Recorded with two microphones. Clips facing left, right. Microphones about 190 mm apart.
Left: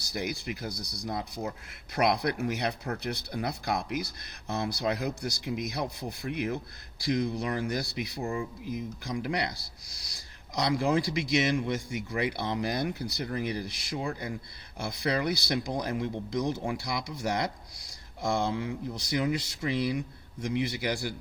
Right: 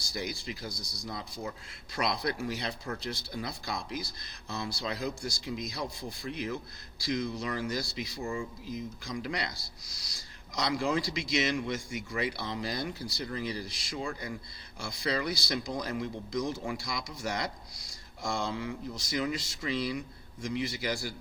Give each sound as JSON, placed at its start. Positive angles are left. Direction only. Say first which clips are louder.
{"t": 0.0, "sound": "speech", "louder": "left 3 dB", "side_deg": 60}
{"t": 8.2, "sound": "speech", "louder": "left 2 dB", "side_deg": 35}
{"t": 8.6, "sound": "speech", "louder": "left 3 dB", "side_deg": 60}